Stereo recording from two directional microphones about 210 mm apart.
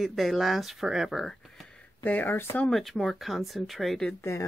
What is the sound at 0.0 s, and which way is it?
Speech, centre (ahead or behind).